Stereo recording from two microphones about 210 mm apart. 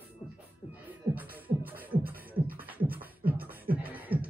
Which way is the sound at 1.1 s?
10° right (ahead or behind).